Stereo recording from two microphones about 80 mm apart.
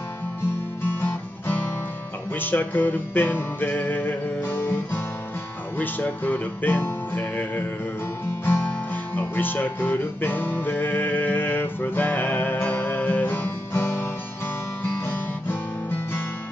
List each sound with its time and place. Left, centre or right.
0.8 s music: left
14.8 s guitar: left